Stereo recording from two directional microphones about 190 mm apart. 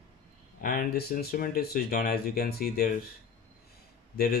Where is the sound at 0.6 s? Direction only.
50° left (ahead or behind).